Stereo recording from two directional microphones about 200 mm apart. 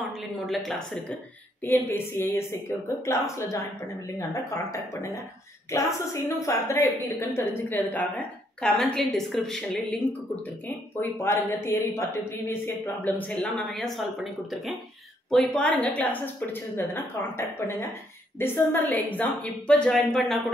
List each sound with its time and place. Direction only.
0.5 s a woman's voice: centre (ahead or behind)
11.0 s speech: 15° left (ahead or behind)